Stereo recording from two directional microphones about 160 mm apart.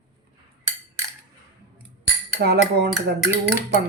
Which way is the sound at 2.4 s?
85° right.